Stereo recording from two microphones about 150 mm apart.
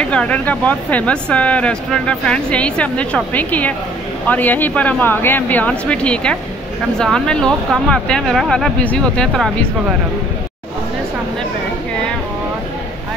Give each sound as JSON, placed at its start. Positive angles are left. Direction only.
{"t": 0.1, "sound": "speech", "side_deg": 10}